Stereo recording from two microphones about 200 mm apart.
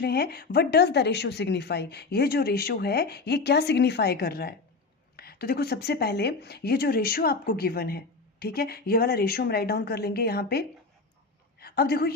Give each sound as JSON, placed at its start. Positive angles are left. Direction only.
{"t": 0.0, "sound": "a woman's voice", "side_deg": 50}